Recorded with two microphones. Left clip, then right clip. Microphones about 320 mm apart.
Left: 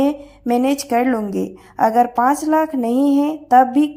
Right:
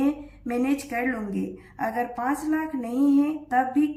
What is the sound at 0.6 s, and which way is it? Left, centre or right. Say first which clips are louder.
A woman's voice: left 7 dB; left.